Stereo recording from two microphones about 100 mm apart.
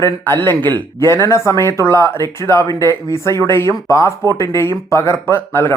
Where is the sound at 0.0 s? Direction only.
25° left (ahead or behind).